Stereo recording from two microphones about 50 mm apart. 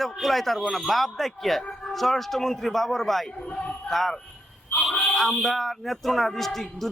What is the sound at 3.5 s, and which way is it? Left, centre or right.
Speech, left.